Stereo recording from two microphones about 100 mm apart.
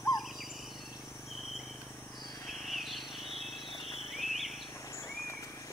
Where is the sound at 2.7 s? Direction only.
Centre (ahead or behind).